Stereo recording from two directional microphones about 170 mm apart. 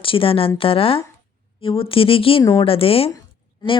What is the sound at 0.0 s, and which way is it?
Speech, 30° left (ahead or behind).